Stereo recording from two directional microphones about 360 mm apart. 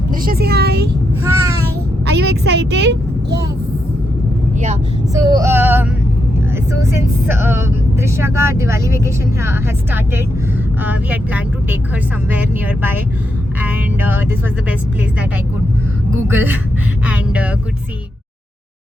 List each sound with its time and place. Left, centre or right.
0.1 s speech: right
1.2 s a sound: centre
2.0 s speech: right
4.6 s speech: centre
14.1 s speech: centre
17.1 s a sound: centre